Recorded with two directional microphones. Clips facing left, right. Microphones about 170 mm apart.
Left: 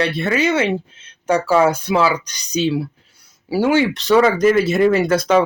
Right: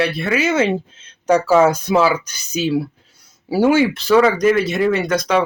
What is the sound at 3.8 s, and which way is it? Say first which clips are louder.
Speech: right 1 dB; centre (ahead or behind).